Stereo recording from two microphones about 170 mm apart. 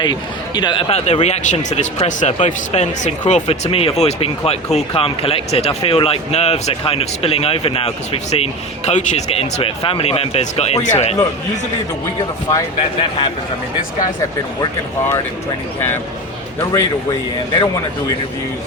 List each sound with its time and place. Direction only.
0.0 s speech: 25° left (ahead or behind); by 11.2 s 40° left (ahead or behind)
12.5 s speech: 25° left (ahead or behind)